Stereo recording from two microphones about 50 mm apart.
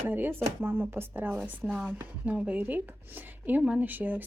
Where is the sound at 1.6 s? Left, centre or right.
Centre.